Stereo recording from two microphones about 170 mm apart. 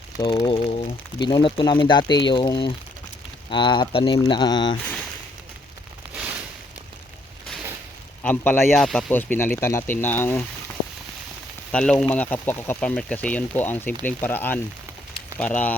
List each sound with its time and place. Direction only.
0.2 s speech: 25° left (ahead or behind)
6.1 s a sound: 10° right (ahead or behind)
8.2 s speech: 10° left (ahead or behind)
11.7 s speech: 5° left (ahead or behind)